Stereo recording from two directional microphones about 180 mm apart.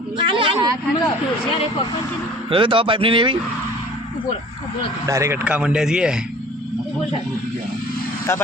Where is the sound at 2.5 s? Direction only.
30° right (ahead or behind).